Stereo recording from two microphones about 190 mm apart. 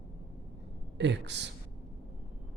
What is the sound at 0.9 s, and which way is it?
Speech, 65° right (ahead or behind).